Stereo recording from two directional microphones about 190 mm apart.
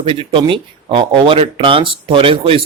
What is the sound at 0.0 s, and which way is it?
Speech, 30° right (ahead or behind).